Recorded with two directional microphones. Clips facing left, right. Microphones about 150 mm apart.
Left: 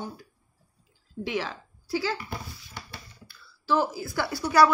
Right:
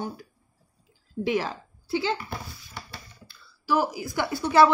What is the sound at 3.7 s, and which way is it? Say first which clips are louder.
A woman's voice: right 1 dB; 15° right (ahead or behind).